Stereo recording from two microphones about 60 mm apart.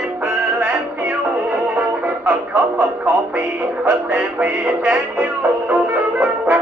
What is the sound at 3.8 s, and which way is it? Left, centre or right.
Music, right.